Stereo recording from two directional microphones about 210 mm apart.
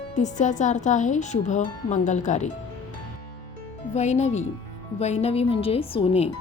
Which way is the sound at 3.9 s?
30° left (ahead or behind).